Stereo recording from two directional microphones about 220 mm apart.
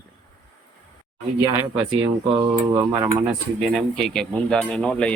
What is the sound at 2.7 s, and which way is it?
Speech, 15° right (ahead or behind).